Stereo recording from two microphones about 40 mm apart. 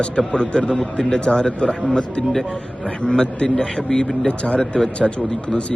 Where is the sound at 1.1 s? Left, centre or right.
Left.